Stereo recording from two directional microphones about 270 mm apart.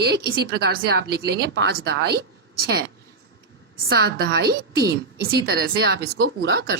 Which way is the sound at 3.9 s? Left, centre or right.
Right.